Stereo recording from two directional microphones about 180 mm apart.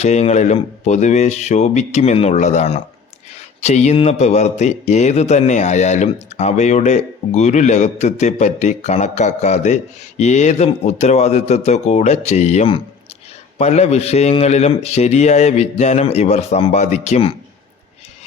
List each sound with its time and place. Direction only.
0.0 s speech: 40° left (ahead or behind)